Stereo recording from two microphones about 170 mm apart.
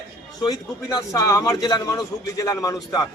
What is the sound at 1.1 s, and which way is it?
A man's voice, 20° left (ahead or behind).